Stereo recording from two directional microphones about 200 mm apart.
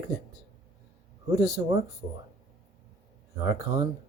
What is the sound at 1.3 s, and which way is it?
Speech, 15° right (ahead or behind).